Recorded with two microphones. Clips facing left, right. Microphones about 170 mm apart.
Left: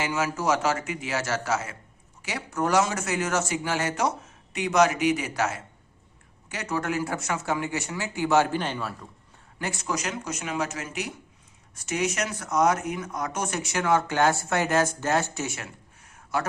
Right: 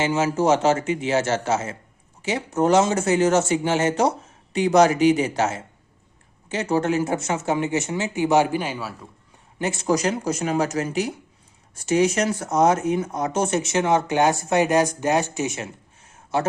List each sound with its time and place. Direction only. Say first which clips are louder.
0.0 s speech: right 6 dB; 25° right (ahead or behind); by 9.0 s 5° right (ahead or behind)
9.6 s speech: right 7 dB; 20° right (ahead or behind)
9.8 s speech: right 11 dB; 35° right (ahead or behind); by 15.7 s 20° right (ahead or behind)
16.1 s a sound: right 5 dB; 25° right (ahead or behind)